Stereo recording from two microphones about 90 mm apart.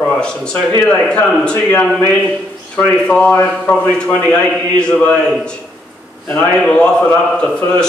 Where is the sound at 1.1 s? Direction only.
15° left (ahead or behind).